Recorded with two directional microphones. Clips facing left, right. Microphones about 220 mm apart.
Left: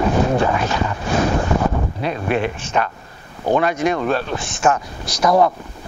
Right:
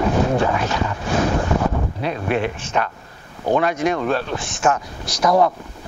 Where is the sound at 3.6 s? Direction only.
10° left (ahead or behind).